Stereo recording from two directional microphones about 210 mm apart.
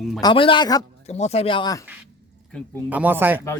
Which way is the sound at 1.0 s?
30° left (ahead or behind).